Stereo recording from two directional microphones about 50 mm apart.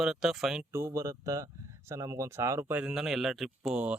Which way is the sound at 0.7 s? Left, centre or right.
Right.